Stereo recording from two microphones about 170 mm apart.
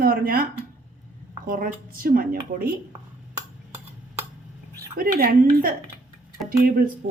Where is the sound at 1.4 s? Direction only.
60° right (ahead or behind).